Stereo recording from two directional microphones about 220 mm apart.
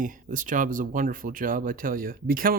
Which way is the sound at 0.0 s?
35° right (ahead or behind).